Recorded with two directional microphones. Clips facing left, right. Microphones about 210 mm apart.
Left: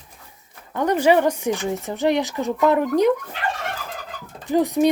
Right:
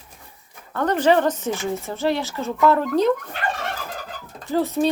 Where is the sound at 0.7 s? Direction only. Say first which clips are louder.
Left 1 dB; 10° left (ahead or behind).